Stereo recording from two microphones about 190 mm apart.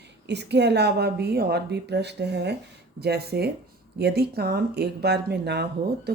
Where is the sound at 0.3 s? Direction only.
65° right (ahead or behind).